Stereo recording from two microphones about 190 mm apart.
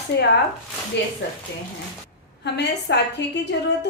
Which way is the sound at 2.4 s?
60° left (ahead or behind).